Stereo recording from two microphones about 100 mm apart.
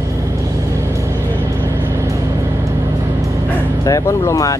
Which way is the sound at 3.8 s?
30° left (ahead or behind).